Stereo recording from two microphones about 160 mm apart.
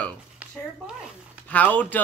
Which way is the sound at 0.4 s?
10° right (ahead or behind).